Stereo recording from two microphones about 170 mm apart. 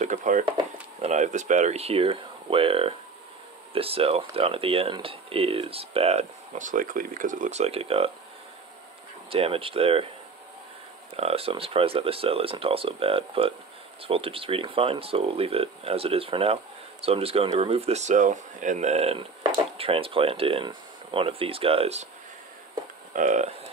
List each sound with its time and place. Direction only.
0.0 s speech: 45° right (ahead or behind)
9.3 s speech: 35° right (ahead or behind)
11.1 s speech: 35° right (ahead or behind)
23.1 s speech: 45° right (ahead or behind)